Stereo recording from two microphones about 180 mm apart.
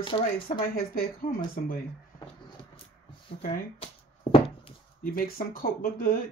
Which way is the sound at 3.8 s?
30° left (ahead or behind).